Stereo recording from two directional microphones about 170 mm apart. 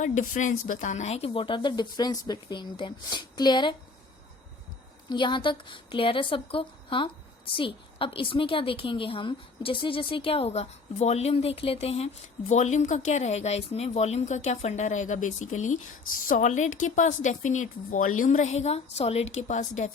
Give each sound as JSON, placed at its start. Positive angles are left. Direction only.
{"t": 0.0, "sound": "speech", "side_deg": 45}
{"t": 5.0, "sound": "a woman's voice", "side_deg": 30}